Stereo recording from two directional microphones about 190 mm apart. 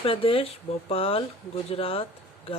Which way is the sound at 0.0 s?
30° left (ahead or behind).